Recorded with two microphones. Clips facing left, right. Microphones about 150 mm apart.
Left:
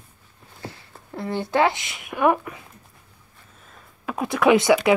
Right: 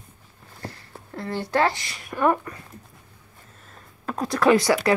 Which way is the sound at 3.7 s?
5° left (ahead or behind).